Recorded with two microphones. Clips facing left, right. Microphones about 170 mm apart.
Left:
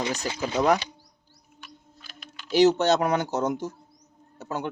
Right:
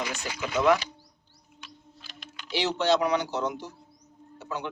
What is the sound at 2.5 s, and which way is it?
Speech, 45° left (ahead or behind).